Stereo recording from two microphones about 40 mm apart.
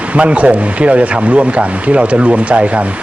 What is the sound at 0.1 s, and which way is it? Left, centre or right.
Speech, right.